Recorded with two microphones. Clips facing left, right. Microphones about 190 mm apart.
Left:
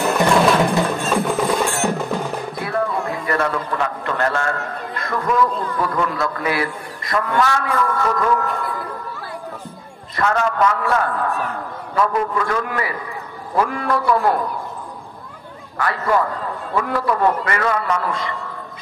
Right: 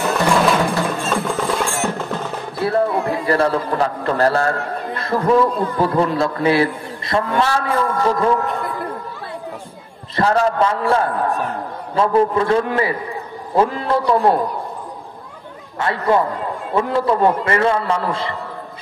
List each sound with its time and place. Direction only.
0.1 s wood block: centre (ahead or behind)
1.1 s music: 5° left (ahead or behind)
2.5 s a man's voice: 30° right (ahead or behind)
10.1 s a man's voice: 35° right (ahead or behind)
15.8 s a man's voice: 25° right (ahead or behind)